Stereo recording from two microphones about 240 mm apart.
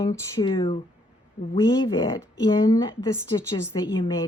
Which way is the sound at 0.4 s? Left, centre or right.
Centre.